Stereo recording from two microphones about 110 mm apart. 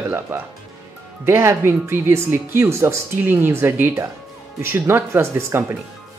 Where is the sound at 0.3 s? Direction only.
15° right (ahead or behind).